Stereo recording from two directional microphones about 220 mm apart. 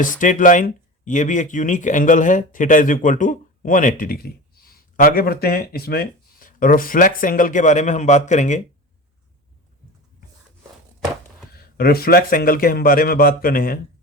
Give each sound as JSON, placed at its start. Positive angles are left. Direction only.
{"t": 0.0, "sound": "speech", "side_deg": 35}
{"t": 11.5, "sound": "speech", "side_deg": 45}